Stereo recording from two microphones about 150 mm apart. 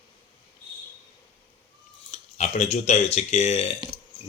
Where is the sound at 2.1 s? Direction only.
45° left (ahead or behind).